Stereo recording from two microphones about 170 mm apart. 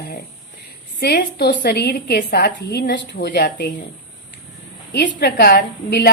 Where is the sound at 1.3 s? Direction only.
75° left (ahead or behind); by 3.4 s 90° left.